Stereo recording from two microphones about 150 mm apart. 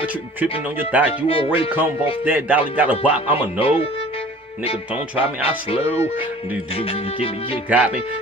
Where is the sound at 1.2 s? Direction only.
40° left (ahead or behind).